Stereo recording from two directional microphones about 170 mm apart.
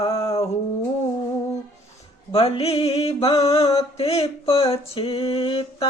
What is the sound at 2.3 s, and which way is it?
Mantra, 35° left (ahead or behind).